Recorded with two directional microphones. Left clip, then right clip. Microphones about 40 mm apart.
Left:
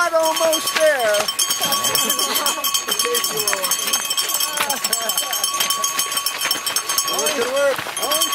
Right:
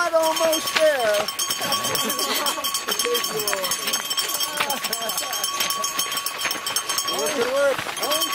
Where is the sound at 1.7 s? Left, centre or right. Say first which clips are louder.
Left 4 dB; left.